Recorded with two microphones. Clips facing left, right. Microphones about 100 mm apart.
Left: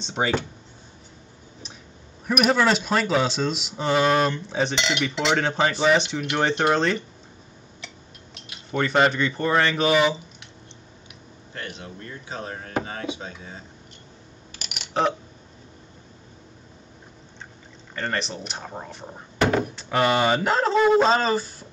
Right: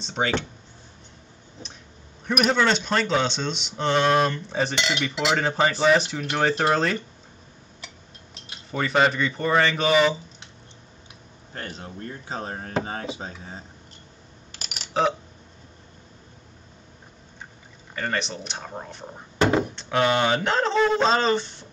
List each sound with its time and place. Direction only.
0.0 s speech: 5° left (ahead or behind)
2.2 s speech: 5° left (ahead or behind)
8.7 s speech: centre (ahead or behind)
11.5 s speech: 40° right (ahead or behind)
15.0 s speech: centre (ahead or behind)
17.9 s speech: centre (ahead or behind)